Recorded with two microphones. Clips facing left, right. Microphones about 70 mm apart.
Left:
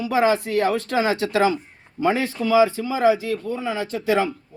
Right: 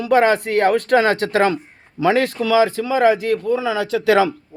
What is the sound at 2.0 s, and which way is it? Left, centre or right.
Speech, right.